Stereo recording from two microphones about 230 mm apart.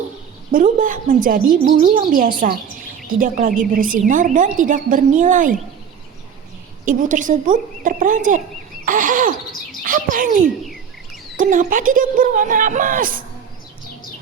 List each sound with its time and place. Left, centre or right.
0.5 s a woman's voice: right
6.8 s a woman's voice: right
8.8 s a sound: right
9.8 s speech: right
10.6 s bird: centre
11.3 s a woman's voice: right